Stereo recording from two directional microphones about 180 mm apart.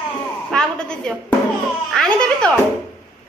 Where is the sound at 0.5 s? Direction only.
5° left (ahead or behind).